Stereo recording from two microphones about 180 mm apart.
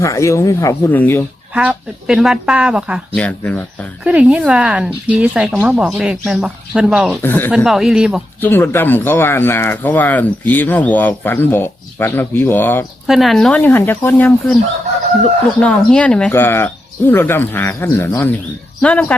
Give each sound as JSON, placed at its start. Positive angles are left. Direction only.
{"t": 0.0, "sound": "speech", "side_deg": 15}
{"t": 1.5, "sound": "speech", "side_deg": -5}
{"t": 3.2, "sound": "speech", "side_deg": 5}
{"t": 4.0, "sound": "speech", "side_deg": -5}
{"t": 7.2, "sound": "speech", "side_deg": 10}
{"t": 7.5, "sound": "speech", "side_deg": -5}
{"t": 8.4, "sound": "speech", "side_deg": 10}
{"t": 13.1, "sound": "speech", "side_deg": 0}